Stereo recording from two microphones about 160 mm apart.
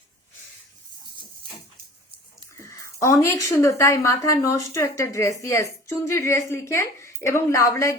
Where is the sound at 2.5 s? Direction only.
20° left (ahead or behind).